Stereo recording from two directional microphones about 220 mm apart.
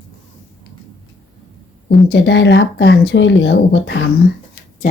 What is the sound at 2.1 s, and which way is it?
Speech, 55° left (ahead or behind).